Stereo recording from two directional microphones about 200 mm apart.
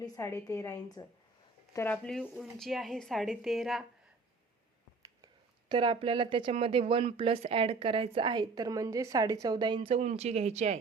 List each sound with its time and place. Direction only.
0.0 s a woman's voice: 15° left (ahead or behind); by 3.8 s centre (ahead or behind)
5.0 s speech: 20° right (ahead or behind)